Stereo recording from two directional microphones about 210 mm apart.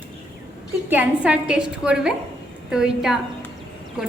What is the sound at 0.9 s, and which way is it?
A woman's voice, 5° right (ahead or behind).